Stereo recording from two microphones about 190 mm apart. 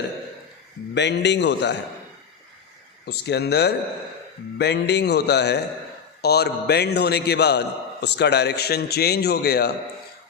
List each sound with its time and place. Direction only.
0.9 s a man's voice: 65° left (ahead or behind)
3.1 s a man's voice: 60° left (ahead or behind)